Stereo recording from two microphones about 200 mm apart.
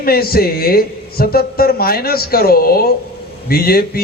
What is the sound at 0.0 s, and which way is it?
A man's voice, 50° left (ahead or behind).